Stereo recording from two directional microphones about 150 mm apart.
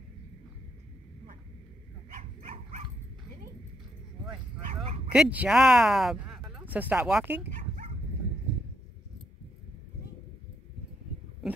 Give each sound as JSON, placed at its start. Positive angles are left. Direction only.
{"t": 2.1, "sound": "dog", "side_deg": -55}
{"t": 5.1, "sound": "speech", "side_deg": -5}
{"t": 11.4, "sound": "a sound", "side_deg": 0}